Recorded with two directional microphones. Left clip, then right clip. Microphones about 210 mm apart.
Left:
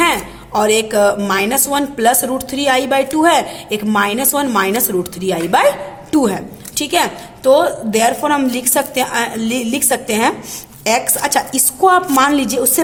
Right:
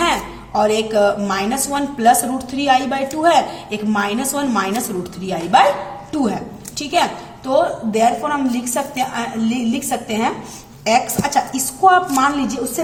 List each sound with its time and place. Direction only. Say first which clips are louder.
0.0 s a woman's voice: left 3 dB; 35° left (ahead or behind)